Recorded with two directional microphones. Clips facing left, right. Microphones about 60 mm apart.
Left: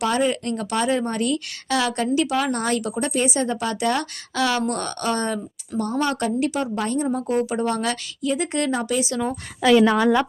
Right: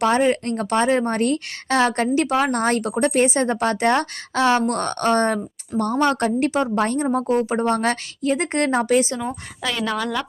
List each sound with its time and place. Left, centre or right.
0.0 s a woman's voice: right
5.7 s a woman's voice: centre
6.1 s a woman's voice: right
9.2 s a woman's voice: centre
9.9 s a woman's voice: left